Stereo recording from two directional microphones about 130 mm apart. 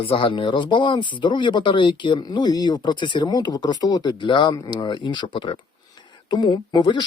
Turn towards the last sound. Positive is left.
turn(degrees=35)  # may be behind; listen again after turning